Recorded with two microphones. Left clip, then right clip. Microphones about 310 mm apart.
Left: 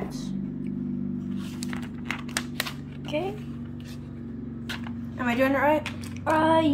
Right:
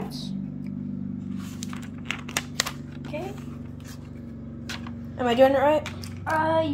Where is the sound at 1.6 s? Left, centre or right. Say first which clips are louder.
Right 1 dB; centre.